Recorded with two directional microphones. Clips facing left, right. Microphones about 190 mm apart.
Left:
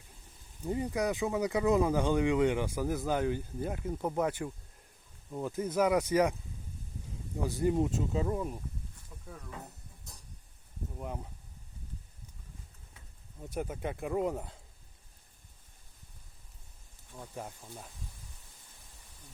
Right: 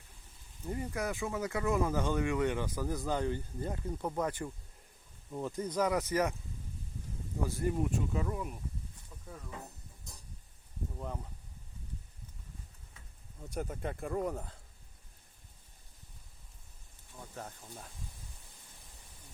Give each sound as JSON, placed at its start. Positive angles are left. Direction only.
{"t": 0.6, "sound": "speech", "side_deg": 15}
{"t": 7.4, "sound": "speech", "side_deg": 20}
{"t": 10.9, "sound": "speech", "side_deg": 15}
{"t": 13.5, "sound": "speech", "side_deg": 5}
{"t": 14.2, "sound": "speech", "side_deg": 20}
{"t": 17.3, "sound": "speech", "side_deg": 10}